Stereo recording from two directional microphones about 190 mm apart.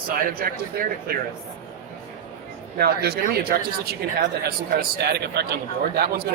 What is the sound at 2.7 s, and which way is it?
A man's voice, 55° right (ahead or behind).